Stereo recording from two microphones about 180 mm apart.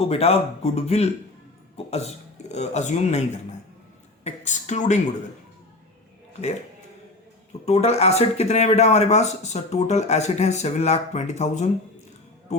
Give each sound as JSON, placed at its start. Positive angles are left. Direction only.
{"t": 0.0, "sound": "a woman's voice", "side_deg": 35}
{"t": 7.6, "sound": "speech", "side_deg": 35}
{"t": 12.5, "sound": "music", "side_deg": 40}